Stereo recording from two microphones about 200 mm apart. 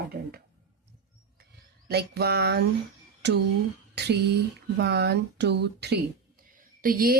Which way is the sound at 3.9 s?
55° right (ahead or behind).